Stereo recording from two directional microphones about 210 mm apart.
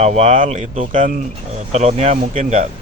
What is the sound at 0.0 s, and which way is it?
Speech, 30° right (ahead or behind).